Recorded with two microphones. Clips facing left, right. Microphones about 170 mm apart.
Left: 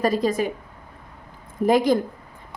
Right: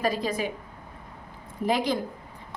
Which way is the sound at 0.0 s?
45° left (ahead or behind).